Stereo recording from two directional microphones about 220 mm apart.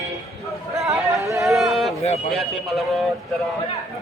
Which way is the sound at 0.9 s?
15° right (ahead or behind).